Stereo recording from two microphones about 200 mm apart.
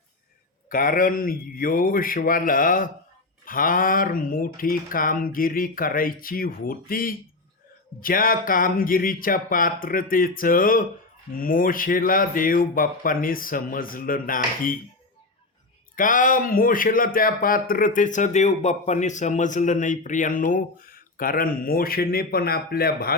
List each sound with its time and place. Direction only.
0.7 s speech: 45° left (ahead or behind)
16.0 s speech: 40° left (ahead or behind)